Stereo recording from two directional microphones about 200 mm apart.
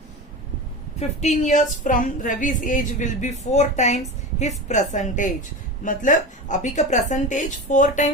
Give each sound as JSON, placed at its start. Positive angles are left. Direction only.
{"t": 0.9, "sound": "a woman's voice", "side_deg": 35}